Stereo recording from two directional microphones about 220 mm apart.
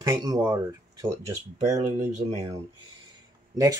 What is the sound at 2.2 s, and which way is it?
Speech, 35° right (ahead or behind).